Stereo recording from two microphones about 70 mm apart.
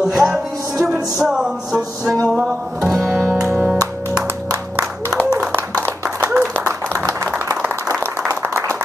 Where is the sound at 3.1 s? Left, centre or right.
Right.